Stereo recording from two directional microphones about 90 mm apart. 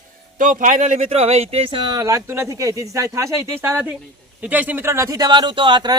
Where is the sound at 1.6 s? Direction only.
80° right.